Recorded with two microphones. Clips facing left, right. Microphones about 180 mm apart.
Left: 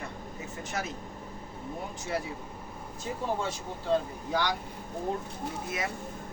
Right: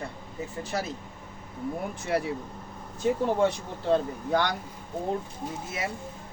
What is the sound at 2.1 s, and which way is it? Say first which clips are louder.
Speech: right 6 dB; 65° right (ahead or behind).